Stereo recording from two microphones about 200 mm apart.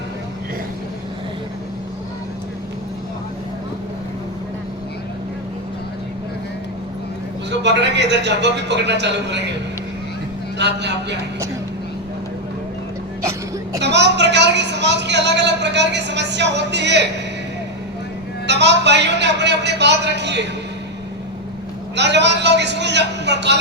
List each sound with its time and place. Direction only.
7.6 s a man's voice: 60° right (ahead or behind)
10.6 s a man's voice: 60° right (ahead or behind)
13.7 s a woman's voice: 60° right (ahead or behind)
18.4 s a man's voice: 60° right (ahead or behind)
21.9 s a man's voice: 60° right (ahead or behind)